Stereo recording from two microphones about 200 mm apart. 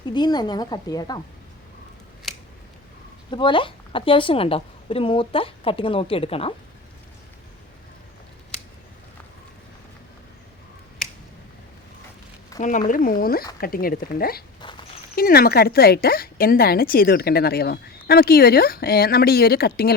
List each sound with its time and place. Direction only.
0.1 s a woman's voice: 20° left (ahead or behind)
3.2 s a woman's voice: 25° left (ahead or behind)
12.5 s speech: 40° left (ahead or behind)
14.6 s walk: 25° left (ahead or behind)
15.1 s speech: 50° left (ahead or behind)